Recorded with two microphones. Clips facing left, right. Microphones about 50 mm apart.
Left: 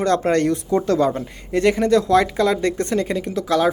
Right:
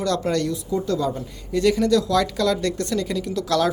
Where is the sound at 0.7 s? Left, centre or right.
Left.